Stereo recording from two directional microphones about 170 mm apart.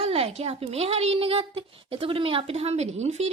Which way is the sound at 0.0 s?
35° right (ahead or behind).